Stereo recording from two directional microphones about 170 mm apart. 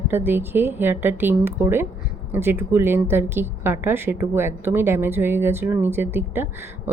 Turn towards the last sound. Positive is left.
turn(degrees=-15)  # may be behind; listen again after turning